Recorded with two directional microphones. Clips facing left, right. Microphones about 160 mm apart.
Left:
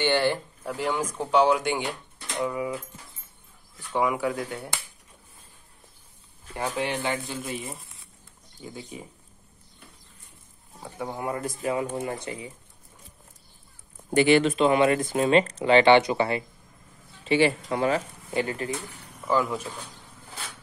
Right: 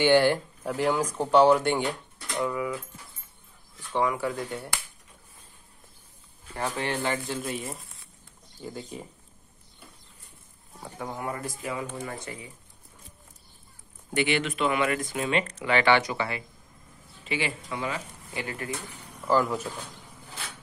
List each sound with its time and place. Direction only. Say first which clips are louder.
0.0 s speech: right 3 dB; 10° right (ahead or behind)
1.3 s speech: right 2 dB; 10° left (ahead or behind)
2.4 s speech: left 1 dB; 25° left (ahead or behind)
3.9 s speech: left 2 dB; 5° left (ahead or behind)
6.5 s speech: left 1 dB; 15° left (ahead or behind)
11.0 s speech: left 3 dB; 20° left (ahead or behind)
14.1 s speech: left 7 dB; 35° left (ahead or behind)
17.6 s speech: left 8 dB; 50° left (ahead or behind)
18.4 s speech: left 6 dB; 30° left (ahead or behind)
19.3 s speech: right 1 dB; centre (ahead or behind)